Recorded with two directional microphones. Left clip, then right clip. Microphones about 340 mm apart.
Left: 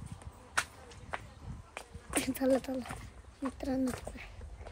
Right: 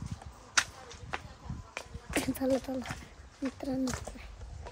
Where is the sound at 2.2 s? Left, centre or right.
Centre.